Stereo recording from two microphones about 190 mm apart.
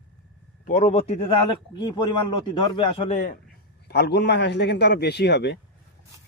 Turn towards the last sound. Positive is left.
turn(degrees=65)  # may be behind; listen again after turning